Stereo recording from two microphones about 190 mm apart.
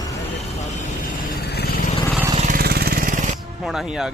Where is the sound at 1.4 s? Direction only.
55° left (ahead or behind).